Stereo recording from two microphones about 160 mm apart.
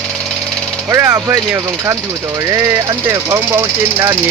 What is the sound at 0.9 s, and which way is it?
Speech, 15° right (ahead or behind).